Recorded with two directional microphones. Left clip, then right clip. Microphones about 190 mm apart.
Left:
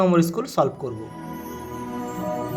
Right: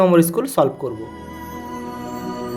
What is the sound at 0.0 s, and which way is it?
Speech, 15° right (ahead or behind).